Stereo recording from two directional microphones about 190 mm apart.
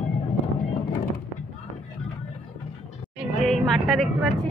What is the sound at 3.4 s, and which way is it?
Music, centre (ahead or behind).